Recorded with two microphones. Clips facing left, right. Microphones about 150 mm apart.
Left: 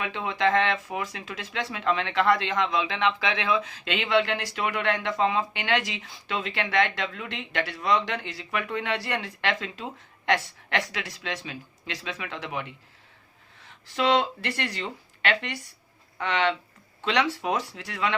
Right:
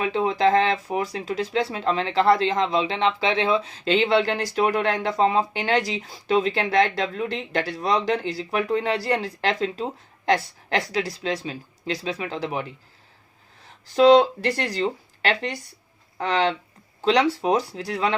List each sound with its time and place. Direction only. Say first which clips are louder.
0.0 s speech: right 6 dB; 35° right (ahead or behind)